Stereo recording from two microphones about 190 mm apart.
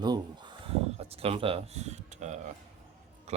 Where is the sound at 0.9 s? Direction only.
30° right (ahead or behind).